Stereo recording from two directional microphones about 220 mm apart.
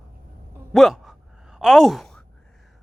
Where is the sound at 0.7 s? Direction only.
Centre (ahead or behind).